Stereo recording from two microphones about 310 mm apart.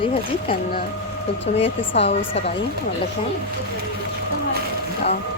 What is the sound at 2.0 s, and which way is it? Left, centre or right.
Speech, centre.